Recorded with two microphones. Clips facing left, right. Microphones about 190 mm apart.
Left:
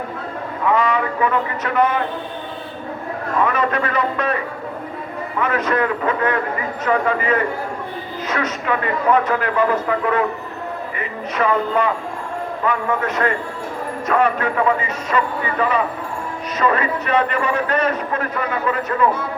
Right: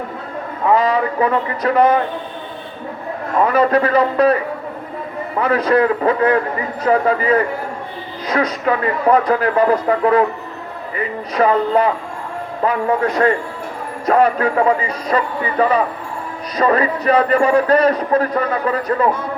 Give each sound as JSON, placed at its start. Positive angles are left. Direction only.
{"t": 0.7, "sound": "speech", "side_deg": -35}
{"t": 3.4, "sound": "a man's voice", "side_deg": -35}
{"t": 5.4, "sound": "a man's voice", "side_deg": -35}
{"t": 11.3, "sound": "a man's voice", "side_deg": -35}